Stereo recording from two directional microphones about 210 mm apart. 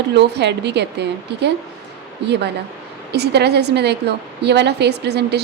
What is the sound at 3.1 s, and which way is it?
A woman's voice, 50° right (ahead or behind).